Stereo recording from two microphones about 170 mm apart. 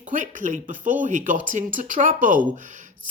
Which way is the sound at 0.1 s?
50° right (ahead or behind).